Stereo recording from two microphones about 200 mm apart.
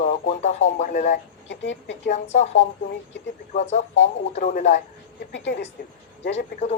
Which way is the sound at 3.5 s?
35° left (ahead or behind).